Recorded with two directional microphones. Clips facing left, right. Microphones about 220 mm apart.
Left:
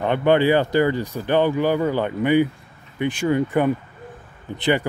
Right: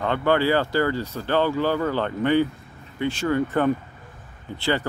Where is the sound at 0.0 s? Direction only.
20° left (ahead or behind).